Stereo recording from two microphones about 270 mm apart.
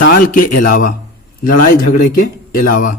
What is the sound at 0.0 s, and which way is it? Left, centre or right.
A man's voice, left.